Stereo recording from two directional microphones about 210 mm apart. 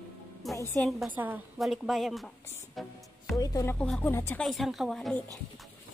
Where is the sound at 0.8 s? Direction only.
Centre (ahead or behind).